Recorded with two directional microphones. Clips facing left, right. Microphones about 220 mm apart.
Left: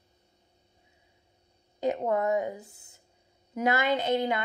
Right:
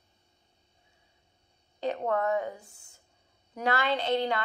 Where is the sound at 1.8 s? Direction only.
15° left (ahead or behind).